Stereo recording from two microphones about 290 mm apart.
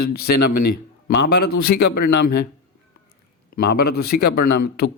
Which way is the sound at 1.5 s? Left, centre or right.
Left.